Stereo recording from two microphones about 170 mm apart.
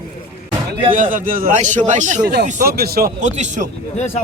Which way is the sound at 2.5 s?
55° right (ahead or behind).